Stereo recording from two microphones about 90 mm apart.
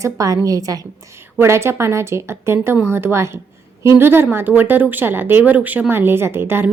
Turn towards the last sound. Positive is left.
turn(degrees=-25)  # may be behind; listen again after turning